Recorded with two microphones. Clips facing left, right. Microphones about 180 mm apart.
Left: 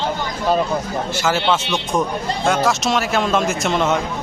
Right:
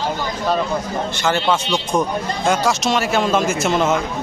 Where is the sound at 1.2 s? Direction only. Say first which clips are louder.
Even; 5° left (ahead or behind).